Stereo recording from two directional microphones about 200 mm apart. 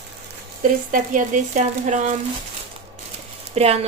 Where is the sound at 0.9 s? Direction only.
40° right (ahead or behind).